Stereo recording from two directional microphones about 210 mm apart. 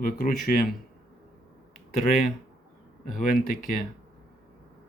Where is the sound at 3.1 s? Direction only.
40° left (ahead or behind).